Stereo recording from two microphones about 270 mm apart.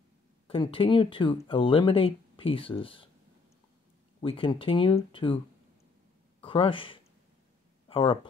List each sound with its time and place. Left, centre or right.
0.5 s speech: centre
4.2 s speech: centre
6.4 s speech: centre